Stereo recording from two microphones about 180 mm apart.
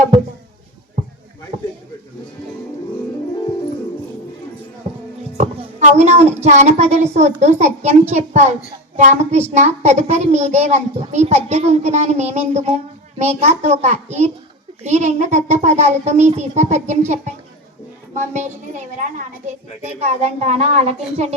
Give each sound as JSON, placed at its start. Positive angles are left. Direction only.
{"t": 5.4, "sound": "a child's voice", "side_deg": -40}